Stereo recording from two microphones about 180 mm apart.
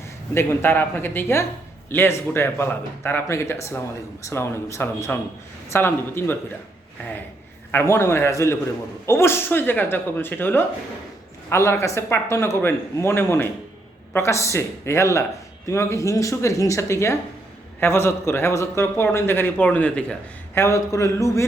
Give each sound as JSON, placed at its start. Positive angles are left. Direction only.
{"t": 0.3, "sound": "a man's voice", "side_deg": 10}
{"t": 7.7, "sound": "a man's voice", "side_deg": 15}